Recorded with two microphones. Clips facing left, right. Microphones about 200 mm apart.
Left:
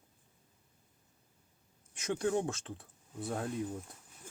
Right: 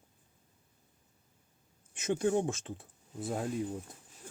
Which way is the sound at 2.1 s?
20° right (ahead or behind).